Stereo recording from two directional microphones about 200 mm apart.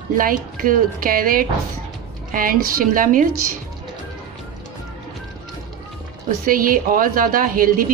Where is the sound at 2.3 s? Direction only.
45° right (ahead or behind).